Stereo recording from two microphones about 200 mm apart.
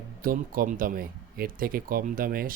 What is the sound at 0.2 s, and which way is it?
Speech, 45° right (ahead or behind).